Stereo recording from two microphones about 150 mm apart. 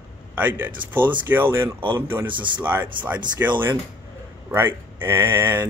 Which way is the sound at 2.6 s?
10° right (ahead or behind).